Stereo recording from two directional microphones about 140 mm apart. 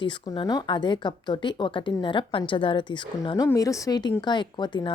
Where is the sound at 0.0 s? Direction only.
35° left (ahead or behind).